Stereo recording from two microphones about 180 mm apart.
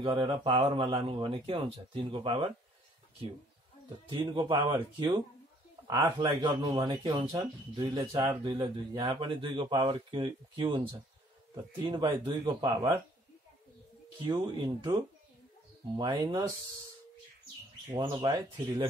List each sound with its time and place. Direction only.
0.0 s speech: 25° right (ahead or behind)
4.1 s speech: 25° right (ahead or behind)
14.2 s speech: 25° right (ahead or behind)
16.0 s speech: 25° right (ahead or behind)
17.9 s speech: 25° right (ahead or behind)